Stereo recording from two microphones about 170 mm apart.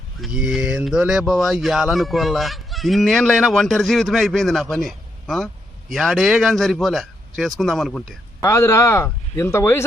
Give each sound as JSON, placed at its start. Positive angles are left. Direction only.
{"t": 0.2, "sound": "speech", "side_deg": -5}
{"t": 8.4, "sound": "speech", "side_deg": 15}